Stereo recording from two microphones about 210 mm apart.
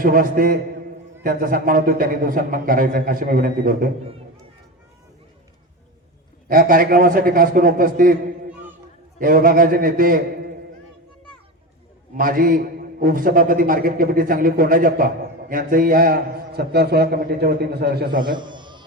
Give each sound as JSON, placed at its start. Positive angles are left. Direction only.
{"t": 0.0, "sound": "a man's voice", "side_deg": -45}
{"t": 6.5, "sound": "a man's voice", "side_deg": -40}
{"t": 9.1, "sound": "a man's voice", "side_deg": -40}
{"t": 12.1, "sound": "a man's voice", "side_deg": -45}
{"t": 18.2, "sound": "a sound", "side_deg": -20}